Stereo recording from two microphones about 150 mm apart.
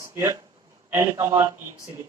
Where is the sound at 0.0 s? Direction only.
20° right (ahead or behind).